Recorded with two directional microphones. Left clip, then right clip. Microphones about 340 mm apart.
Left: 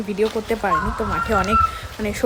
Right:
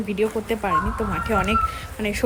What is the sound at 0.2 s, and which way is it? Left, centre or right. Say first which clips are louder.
Speech: left 3 dB; centre.